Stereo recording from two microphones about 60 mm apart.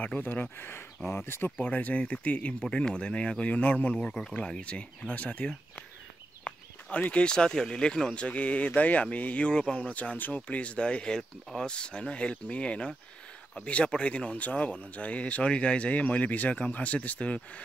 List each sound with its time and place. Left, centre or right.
0.0 s speech: left
1.6 s speech: left
4.1 s speech: centre
4.4 s speech: centre